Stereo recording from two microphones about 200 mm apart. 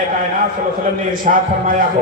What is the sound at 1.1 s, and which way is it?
Speech, 45° right (ahead or behind).